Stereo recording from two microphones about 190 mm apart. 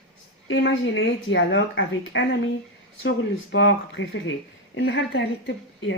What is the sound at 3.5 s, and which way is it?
Speech, 75° left (ahead or behind).